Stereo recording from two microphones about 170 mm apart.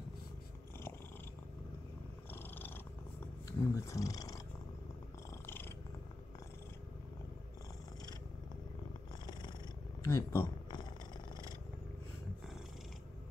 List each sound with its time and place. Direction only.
2.3 s cat: 10° left (ahead or behind)
10.0 s speech: 15° left (ahead or behind)